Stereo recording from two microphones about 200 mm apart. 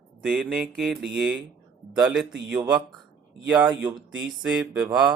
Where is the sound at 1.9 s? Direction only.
5° right (ahead or behind).